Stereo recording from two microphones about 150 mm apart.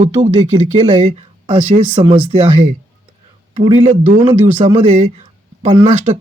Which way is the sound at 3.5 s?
40° right (ahead or behind).